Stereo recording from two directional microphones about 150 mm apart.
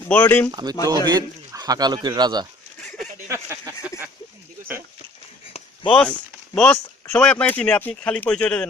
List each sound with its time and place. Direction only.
0.1 s speech: 10° left (ahead or behind)
0.5 s speech: 25° right (ahead or behind)
5.9 s speech: 5° left (ahead or behind)